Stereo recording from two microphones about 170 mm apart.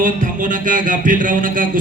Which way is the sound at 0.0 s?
50° right (ahead or behind).